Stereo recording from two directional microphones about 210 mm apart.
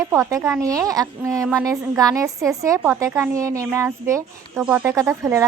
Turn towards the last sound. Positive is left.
turn(degrees=-15)  # may be behind; listen again after turning